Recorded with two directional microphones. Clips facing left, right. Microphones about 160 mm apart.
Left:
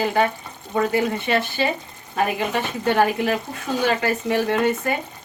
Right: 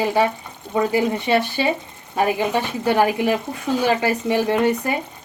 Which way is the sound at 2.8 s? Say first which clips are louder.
Right 1 dB; 15° right (ahead or behind).